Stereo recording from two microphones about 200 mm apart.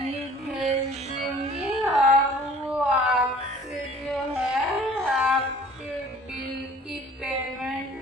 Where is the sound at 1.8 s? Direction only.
Centre (ahead or behind).